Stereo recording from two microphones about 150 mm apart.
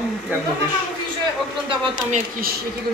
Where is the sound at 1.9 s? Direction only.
60° right (ahead or behind).